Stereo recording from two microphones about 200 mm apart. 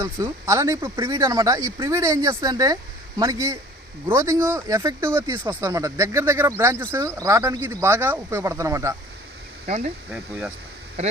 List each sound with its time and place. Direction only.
0.0 s speech: 15° right (ahead or behind)
9.6 s speech: 35° right (ahead or behind)